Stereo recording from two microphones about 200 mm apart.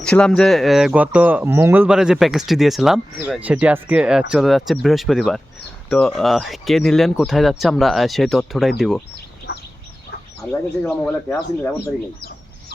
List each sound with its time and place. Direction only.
0.0 s speech: 5° left (ahead or behind)
9.5 s fowl: 50° left (ahead or behind)
10.5 s speech: 10° left (ahead or behind)